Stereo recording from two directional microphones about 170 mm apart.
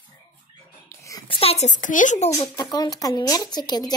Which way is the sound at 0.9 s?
20° left (ahead or behind).